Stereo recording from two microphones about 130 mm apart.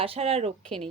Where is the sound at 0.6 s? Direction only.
5° left (ahead or behind).